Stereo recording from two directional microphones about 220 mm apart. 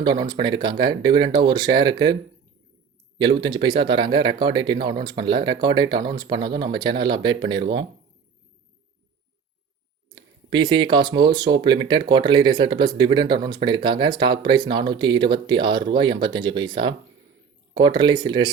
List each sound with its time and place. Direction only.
0.0 s speech: 20° right (ahead or behind)
3.4 s speech: 20° right (ahead or behind)
10.2 s a sound: 20° right (ahead or behind)
10.9 s speech: 20° right (ahead or behind)